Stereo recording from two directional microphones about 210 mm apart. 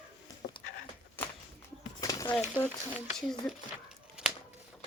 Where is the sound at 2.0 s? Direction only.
15° left (ahead or behind).